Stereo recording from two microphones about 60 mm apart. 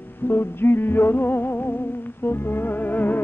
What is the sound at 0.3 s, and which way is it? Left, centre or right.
Music, left.